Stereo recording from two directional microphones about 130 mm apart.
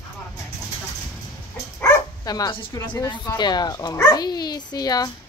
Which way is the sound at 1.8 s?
30° left (ahead or behind).